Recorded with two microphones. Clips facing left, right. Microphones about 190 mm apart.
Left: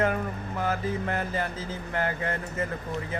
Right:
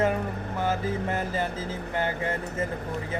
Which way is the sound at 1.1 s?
25° right (ahead or behind).